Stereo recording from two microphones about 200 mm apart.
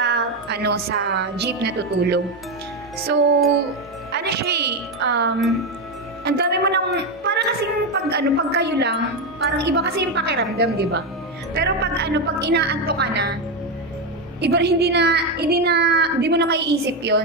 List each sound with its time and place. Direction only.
0.0 s a woman's voice: 55° right (ahead or behind)
4.1 s a woman's voice: 55° right (ahead or behind)
14.4 s a woman's voice: 55° right (ahead or behind)